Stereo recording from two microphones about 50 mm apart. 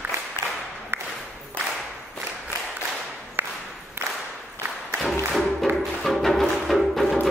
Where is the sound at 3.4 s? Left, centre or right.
Right.